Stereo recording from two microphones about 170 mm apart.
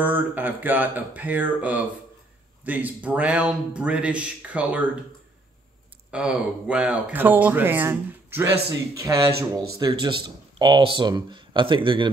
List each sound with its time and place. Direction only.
0.0 s speech: 10° right (ahead or behind)
6.1 s speech: 5° right (ahead or behind); by 12.1 s 30° right (ahead or behind)